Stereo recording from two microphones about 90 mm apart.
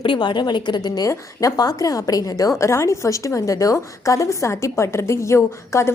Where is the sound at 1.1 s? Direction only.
40° left (ahead or behind).